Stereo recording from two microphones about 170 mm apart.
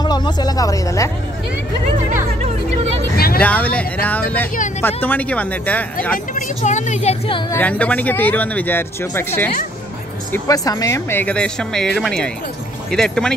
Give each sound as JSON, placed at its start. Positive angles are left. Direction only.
{"t": 0.0, "sound": "speech", "side_deg": 25}
{"t": 3.2, "sound": "vehicle", "side_deg": 65}
{"t": 3.4, "sound": "speech", "side_deg": 10}
{"t": 6.1, "sound": "a woman's voice", "side_deg": 45}
{"t": 7.5, "sound": "speech", "side_deg": 10}
{"t": 10.3, "sound": "speech", "side_deg": 20}